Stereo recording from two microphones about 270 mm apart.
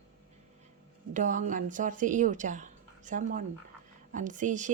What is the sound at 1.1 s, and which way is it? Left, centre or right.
A woman's voice, right.